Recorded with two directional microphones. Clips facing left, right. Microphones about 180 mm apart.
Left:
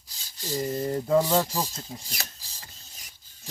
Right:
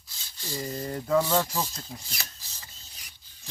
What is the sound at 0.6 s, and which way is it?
Speech, 25° left (ahead or behind).